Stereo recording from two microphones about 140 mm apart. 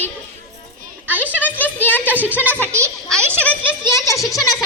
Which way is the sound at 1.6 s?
10° left (ahead or behind).